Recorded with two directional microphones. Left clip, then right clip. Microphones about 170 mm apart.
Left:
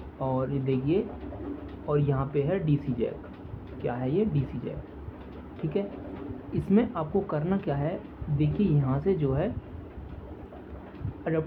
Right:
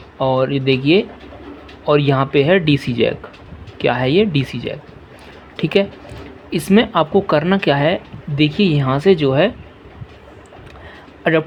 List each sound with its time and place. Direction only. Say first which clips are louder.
0.2 s speech: right 14 dB; 70° right (ahead or behind)
1.9 s speech: right 14 dB; 85° right; by 4.7 s 70° right (ahead or behind)
6.5 s speech: right 12 dB; 65° right (ahead or behind)
11.2 s speech: right 14 dB; 90° right